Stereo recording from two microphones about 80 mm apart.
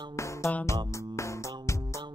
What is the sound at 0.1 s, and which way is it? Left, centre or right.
Music, left.